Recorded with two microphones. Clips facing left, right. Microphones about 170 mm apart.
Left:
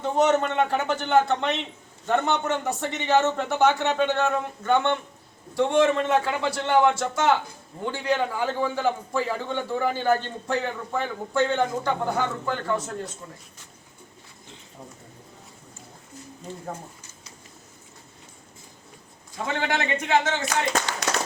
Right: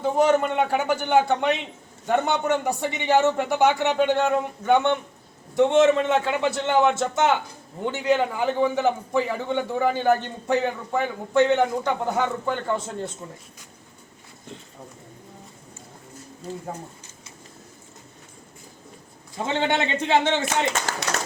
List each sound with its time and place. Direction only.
0.0 s a man's voice: 5° right (ahead or behind)
19.4 s a man's voice: 25° right (ahead or behind)